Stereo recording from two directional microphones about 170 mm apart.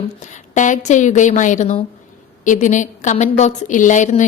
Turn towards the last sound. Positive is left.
turn(degrees=45)  # may be behind; listen again after turning